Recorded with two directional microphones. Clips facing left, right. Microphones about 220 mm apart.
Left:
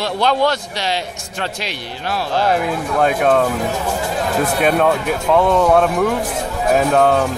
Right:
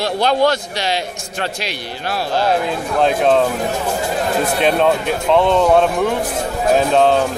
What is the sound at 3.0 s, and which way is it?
Speech, 25° right (ahead or behind).